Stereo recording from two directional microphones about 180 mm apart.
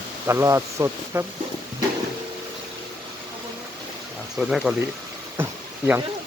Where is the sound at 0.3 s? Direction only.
15° right (ahead or behind).